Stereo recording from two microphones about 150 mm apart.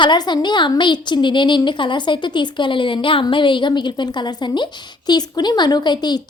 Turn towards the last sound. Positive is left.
turn(degrees=30)  # may be behind; listen again after turning